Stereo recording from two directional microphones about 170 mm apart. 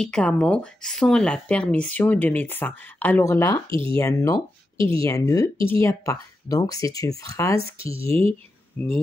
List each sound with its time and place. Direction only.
0.0 s speech: 5° left (ahead or behind)
3.7 s speech: 30° right (ahead or behind)
4.0 s speech: 20° left (ahead or behind)
4.7 s speech: 30° right (ahead or behind)
5.0 s speech: 20° left (ahead or behind)
7.8 s speech: 35° right (ahead or behind)
8.7 s speech: 10° left (ahead or behind)